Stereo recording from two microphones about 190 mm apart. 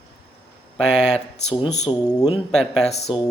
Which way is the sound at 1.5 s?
35° left (ahead or behind).